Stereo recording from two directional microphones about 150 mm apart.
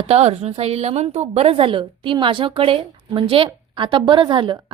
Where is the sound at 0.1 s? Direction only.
45° right (ahead or behind).